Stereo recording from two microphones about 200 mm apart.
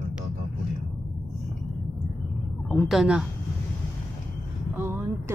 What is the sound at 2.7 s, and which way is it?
Speech, centre (ahead or behind).